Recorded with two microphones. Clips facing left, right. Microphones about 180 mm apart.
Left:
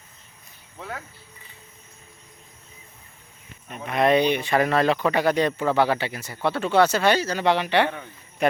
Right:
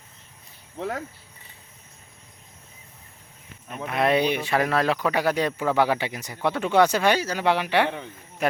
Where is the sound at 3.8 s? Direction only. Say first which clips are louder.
Left 2 dB; 5° right (ahead or behind).